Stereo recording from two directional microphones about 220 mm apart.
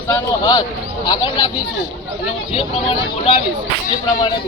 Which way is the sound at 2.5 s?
25° left (ahead or behind).